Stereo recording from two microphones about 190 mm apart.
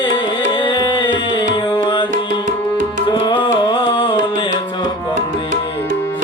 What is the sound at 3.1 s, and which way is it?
Music, 25° left (ahead or behind).